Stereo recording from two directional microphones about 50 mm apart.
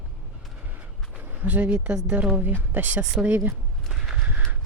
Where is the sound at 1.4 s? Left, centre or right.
Right.